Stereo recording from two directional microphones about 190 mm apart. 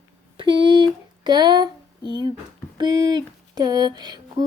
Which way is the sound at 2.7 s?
20° right (ahead or behind).